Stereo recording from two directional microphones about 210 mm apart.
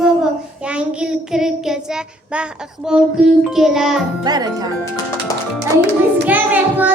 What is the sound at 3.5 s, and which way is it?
Music, centre (ahead or behind).